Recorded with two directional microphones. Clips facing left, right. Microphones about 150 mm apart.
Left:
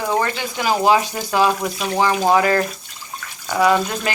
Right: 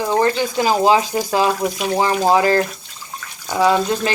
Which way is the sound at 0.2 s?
30° right (ahead or behind).